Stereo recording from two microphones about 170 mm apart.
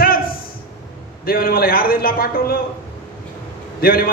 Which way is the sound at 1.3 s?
60° left (ahead or behind).